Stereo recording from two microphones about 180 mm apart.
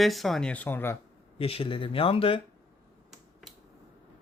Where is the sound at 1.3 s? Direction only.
30° left (ahead or behind).